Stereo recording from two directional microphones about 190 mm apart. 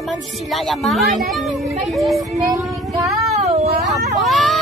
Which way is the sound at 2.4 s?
20° right (ahead or behind).